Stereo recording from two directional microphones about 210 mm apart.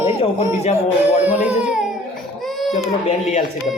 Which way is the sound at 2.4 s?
Centre (ahead or behind).